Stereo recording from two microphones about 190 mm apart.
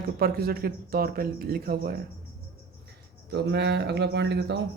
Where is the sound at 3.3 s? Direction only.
60° right (ahead or behind).